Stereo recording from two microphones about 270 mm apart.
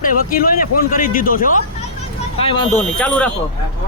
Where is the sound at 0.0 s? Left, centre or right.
Left.